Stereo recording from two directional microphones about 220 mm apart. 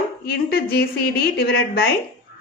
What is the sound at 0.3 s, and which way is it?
A woman's voice, 45° left (ahead or behind).